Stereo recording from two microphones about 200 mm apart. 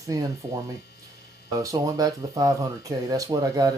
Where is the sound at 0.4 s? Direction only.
10° right (ahead or behind).